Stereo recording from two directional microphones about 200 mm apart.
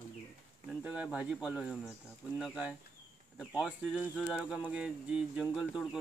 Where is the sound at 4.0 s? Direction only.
Centre (ahead or behind).